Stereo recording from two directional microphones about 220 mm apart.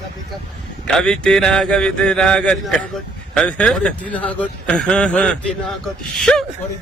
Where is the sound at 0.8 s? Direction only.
5° left (ahead or behind).